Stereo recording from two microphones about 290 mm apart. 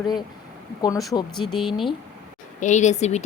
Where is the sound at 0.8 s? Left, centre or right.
Centre.